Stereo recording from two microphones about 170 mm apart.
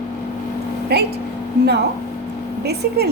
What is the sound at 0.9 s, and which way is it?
Speech, 70° right (ahead or behind).